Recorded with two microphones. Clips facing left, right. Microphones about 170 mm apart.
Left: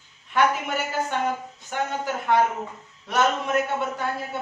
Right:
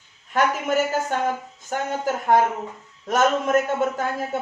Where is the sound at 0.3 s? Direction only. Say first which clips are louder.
Right 2 dB; 45° right (ahead or behind).